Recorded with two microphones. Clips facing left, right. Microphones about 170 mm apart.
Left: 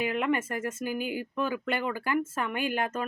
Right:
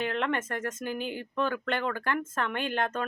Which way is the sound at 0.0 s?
10° left (ahead or behind).